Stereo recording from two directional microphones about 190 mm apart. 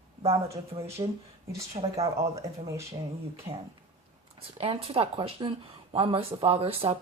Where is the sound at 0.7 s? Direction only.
30° right (ahead or behind).